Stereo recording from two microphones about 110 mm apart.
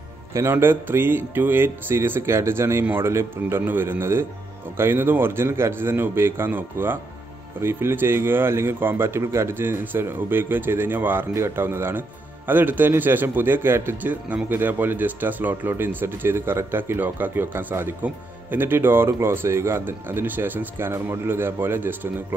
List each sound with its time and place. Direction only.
0.3 s a man's voice: 25° right (ahead or behind)